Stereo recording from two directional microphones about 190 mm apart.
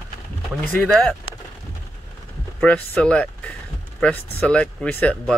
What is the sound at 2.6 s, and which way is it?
Speech, 5° left (ahead or behind).